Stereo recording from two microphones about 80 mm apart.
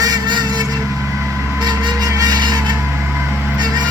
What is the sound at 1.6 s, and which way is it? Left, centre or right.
Music, right.